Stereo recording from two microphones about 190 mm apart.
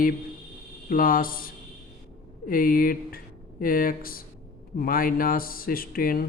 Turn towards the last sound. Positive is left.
turn(degrees=50)  # may be behind; listen again after turning